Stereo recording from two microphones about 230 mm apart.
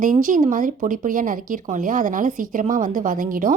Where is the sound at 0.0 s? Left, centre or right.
Right.